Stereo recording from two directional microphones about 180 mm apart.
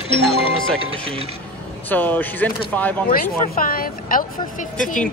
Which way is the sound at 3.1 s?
55° left (ahead or behind).